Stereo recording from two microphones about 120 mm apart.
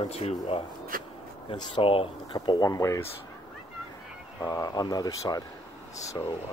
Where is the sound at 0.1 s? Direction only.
60° left (ahead or behind).